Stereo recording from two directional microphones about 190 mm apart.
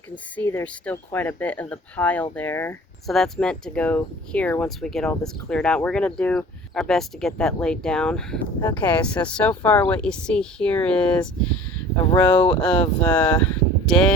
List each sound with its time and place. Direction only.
0.3 s speech: 10° left (ahead or behind)
12.3 s speech: 25° left (ahead or behind)
12.6 s speech: 5° left (ahead or behind)
13.4 s a sound: 5° left (ahead or behind)